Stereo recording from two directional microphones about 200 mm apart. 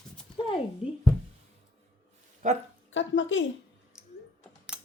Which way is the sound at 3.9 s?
5° right (ahead or behind).